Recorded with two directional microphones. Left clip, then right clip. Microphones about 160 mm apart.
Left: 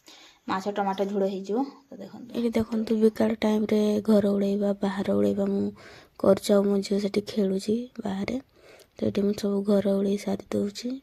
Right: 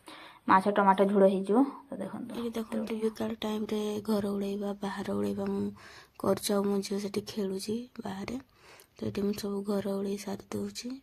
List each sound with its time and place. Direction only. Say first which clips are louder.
0.4 s speech: right 5 dB; centre (ahead or behind)
2.4 s speech: left 9 dB; 45° left (ahead or behind)